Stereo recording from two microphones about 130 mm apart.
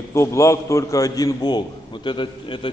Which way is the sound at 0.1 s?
20° left (ahead or behind).